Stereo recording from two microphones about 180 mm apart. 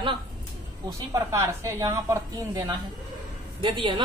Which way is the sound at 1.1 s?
15° right (ahead or behind).